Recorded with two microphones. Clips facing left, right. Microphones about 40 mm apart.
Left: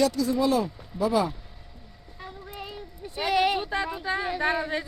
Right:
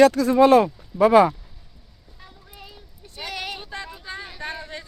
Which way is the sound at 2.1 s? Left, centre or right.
Centre.